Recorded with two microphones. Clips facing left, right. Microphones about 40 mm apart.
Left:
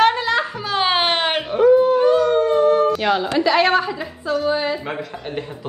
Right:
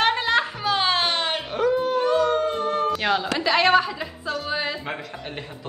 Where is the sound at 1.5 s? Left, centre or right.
Centre.